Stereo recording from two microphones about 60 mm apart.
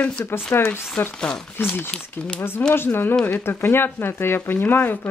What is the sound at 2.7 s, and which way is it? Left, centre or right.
Speech, left.